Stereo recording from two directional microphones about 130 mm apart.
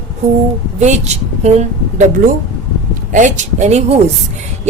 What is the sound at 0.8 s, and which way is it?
Speech, 60° right (ahead or behind).